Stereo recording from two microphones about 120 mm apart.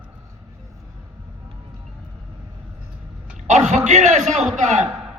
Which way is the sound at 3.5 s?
80° right.